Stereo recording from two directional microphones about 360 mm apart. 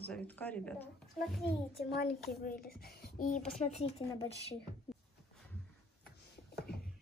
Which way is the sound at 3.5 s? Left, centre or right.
Centre.